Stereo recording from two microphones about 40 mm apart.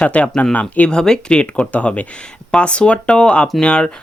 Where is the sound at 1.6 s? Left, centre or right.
Left.